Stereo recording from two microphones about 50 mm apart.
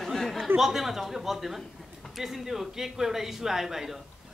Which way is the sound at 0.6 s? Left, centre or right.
Centre.